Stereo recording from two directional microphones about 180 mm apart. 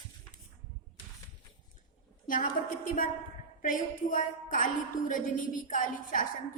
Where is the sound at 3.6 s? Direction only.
50° left (ahead or behind).